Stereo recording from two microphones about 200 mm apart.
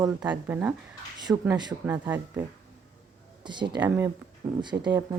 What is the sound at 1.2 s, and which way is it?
Speech, 20° right (ahead or behind).